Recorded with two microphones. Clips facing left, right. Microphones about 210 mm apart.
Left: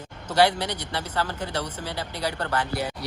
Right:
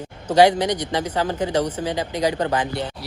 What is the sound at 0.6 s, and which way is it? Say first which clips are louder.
Speech: right 8 dB; 15° right (ahead or behind).